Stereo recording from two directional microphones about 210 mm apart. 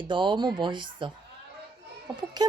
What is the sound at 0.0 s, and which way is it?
A woman's voice, 25° right (ahead or behind).